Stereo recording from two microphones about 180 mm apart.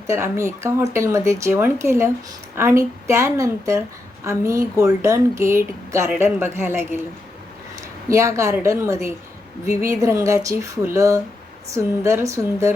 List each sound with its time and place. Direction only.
0.1 s a woman's voice: 15° right (ahead or behind)
8.1 s a woman's voice: 15° right (ahead or behind)